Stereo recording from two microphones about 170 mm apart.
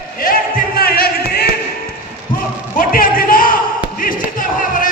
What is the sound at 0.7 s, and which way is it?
Music, 65° left (ahead or behind).